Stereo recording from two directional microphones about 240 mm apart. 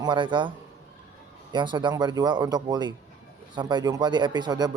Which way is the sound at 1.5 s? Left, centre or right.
Centre.